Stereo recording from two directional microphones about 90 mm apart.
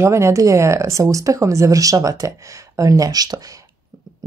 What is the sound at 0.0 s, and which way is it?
Speech, 30° right (ahead or behind).